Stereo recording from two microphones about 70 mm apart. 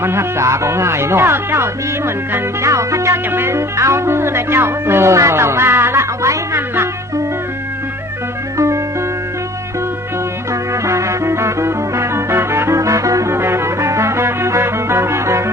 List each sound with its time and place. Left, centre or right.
0.0 s speech: right
8.5 s music: right
10.5 s music: right
13.3 s music: right